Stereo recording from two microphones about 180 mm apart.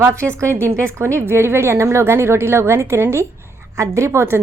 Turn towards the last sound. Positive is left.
turn(degrees=-15)  # may be behind; listen again after turning